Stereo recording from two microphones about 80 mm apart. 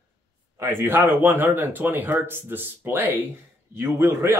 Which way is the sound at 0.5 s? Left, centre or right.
Right.